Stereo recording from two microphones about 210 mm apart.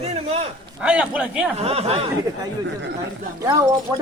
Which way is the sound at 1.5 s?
30° right (ahead or behind).